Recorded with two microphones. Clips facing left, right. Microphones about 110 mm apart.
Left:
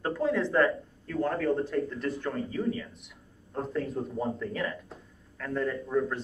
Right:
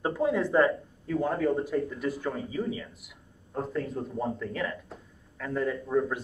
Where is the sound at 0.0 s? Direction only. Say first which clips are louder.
Right 1 dB; 15° right (ahead or behind).